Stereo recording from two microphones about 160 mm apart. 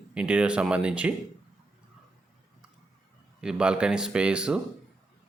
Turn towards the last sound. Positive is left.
turn(degrees=-5)  # may be behind; listen again after turning